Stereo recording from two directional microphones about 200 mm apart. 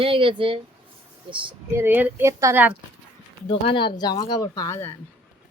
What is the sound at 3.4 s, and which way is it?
Speech, 25° left (ahead or behind).